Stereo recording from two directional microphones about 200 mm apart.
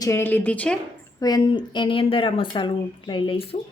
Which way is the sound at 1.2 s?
20° left (ahead or behind).